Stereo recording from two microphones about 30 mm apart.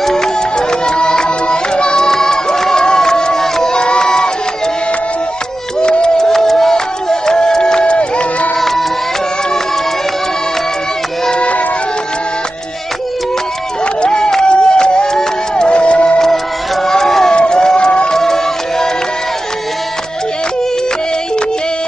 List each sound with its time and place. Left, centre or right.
0.0 s music: centre; by 2.0 s left
2.0 s crowd: centre
3.7 s run: left
5.8 s a sound: left
6.1 s music: centre
7.8 s music: left
8.5 s music: centre
14.0 s music: left
16.8 s a sound: centre
17.3 s a sound: left
18.1 s music: centre